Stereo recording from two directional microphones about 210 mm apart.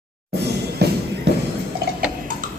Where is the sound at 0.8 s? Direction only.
50° right (ahead or behind).